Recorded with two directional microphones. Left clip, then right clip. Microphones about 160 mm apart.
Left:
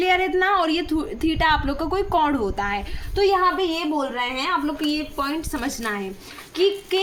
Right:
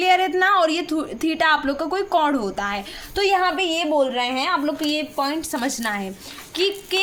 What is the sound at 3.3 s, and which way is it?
A woman's voice, 40° right (ahead or behind).